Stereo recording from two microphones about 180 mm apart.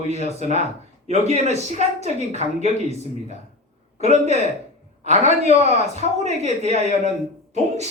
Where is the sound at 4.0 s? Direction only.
40° right (ahead or behind).